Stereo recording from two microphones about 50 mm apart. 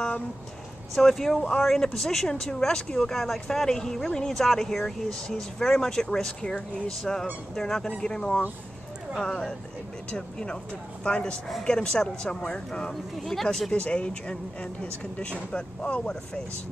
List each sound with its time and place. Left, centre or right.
0.9 s speech: centre
13.2 s speech: centre
13.7 s speech: left